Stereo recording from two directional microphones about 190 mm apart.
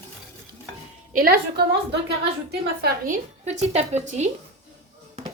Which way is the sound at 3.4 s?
35° right (ahead or behind).